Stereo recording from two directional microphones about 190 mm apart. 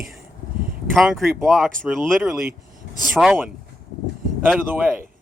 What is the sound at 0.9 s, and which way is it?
Speech, centre (ahead or behind).